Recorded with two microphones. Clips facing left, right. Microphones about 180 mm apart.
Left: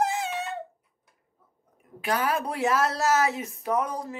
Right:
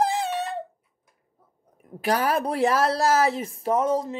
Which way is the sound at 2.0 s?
35° right (ahead or behind).